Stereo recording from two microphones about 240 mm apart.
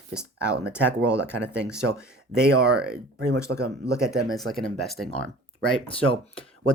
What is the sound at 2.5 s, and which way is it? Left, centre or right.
Speech, right.